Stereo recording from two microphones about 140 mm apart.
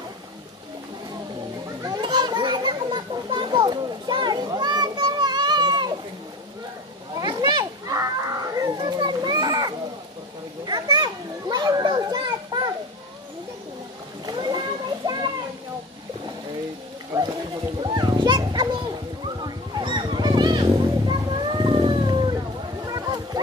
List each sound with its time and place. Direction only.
1.8 s children playing: 30° right (ahead or behind)
7.2 s children playing: 30° right (ahead or behind)
14.2 s splash: 30° right (ahead or behind)
15.0 s a sound: 30° right (ahead or behind)
17.7 s children playing: 30° right (ahead or behind)
22.8 s a sound: 25° right (ahead or behind)